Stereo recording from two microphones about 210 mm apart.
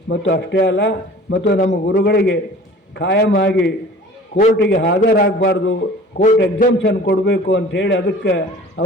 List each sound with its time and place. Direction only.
0.1 s a man's voice: 55° left (ahead or behind)